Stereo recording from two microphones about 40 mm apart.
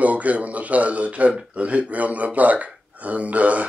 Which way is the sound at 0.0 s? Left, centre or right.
Right.